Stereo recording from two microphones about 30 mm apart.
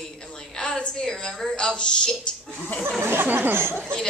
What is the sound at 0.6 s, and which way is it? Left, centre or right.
Speech, left.